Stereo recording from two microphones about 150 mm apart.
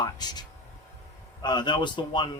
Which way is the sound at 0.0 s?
25° left (ahead or behind).